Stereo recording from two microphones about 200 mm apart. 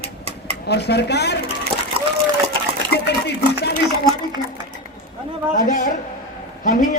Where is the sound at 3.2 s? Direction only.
55° left (ahead or behind).